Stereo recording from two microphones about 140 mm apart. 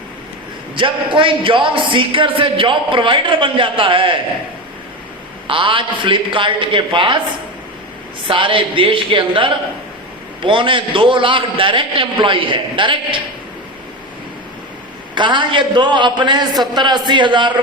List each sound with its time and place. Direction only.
0.8 s speech: 35° right (ahead or behind)
5.5 s speech: 35° right (ahead or behind)
8.3 s speech: 40° right (ahead or behind)
15.1 s speech: 35° right (ahead or behind)